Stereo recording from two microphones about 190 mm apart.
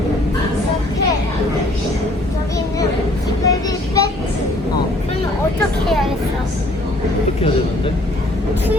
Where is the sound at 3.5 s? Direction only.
20° left (ahead or behind).